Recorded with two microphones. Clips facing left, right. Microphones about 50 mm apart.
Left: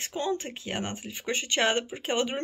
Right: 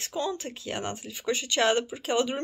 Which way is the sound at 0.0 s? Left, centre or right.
Left.